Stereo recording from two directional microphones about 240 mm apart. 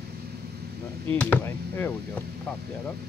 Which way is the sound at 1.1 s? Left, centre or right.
Centre.